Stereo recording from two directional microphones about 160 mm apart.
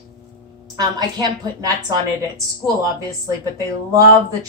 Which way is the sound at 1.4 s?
25° right (ahead or behind).